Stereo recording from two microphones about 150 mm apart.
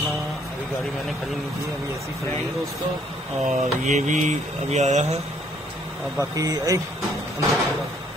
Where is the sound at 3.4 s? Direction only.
50° right (ahead or behind).